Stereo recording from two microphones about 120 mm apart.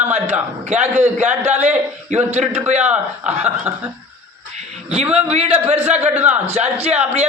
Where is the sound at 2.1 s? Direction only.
75° right (ahead or behind).